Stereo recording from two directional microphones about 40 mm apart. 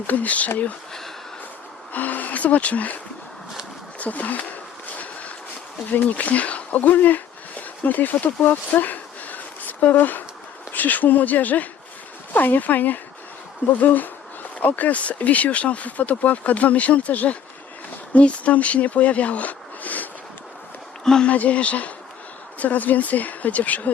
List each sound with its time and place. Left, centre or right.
0.1 s speech: left
1.9 s speech: left
4.0 s speech: left
4.9 s vehicle: left
5.9 s speech: left
21.0 s speech: centre
21.2 s speech: left